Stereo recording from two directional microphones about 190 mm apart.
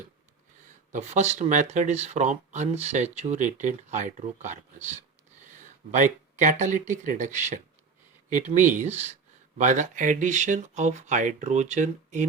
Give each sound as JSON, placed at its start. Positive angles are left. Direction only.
{"t": 0.9, "sound": "speech", "side_deg": -40}